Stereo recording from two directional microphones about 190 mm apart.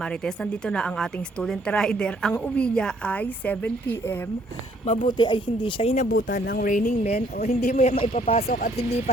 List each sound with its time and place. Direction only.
0.0 s speech: 5° left (ahead or behind)
4.9 s speech: 25° left (ahead or behind)
6.2 s a man's voice: 50° left (ahead or behind); by 8.4 s 30° left (ahead or behind)
8.4 s speech: 45° left (ahead or behind)